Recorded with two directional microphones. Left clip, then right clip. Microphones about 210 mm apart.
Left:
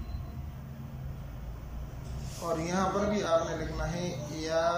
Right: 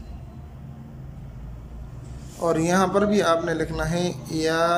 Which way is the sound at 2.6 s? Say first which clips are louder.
Right 8 dB; 50° right (ahead or behind).